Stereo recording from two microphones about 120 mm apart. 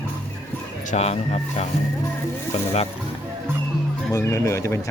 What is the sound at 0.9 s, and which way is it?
Speech, 65° left (ahead or behind).